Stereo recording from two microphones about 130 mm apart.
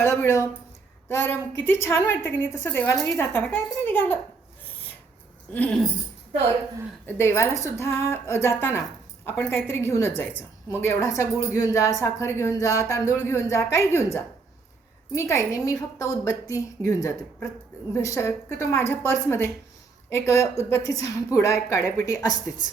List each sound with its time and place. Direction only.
0.0 s a woman's voice: 20° left (ahead or behind)
4.6 s rub: 15° left (ahead or behind)
5.5 s a woman's voice: 10° left (ahead or behind)
7.1 s a woman's voice: 20° left (ahead or behind)